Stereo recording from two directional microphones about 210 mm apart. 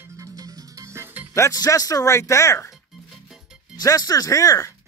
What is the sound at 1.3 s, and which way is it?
Speech, 15° left (ahead or behind).